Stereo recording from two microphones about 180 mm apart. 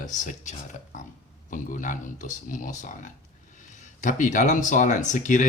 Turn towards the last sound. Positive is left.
turn(degrees=45)  # may be behind; listen again after turning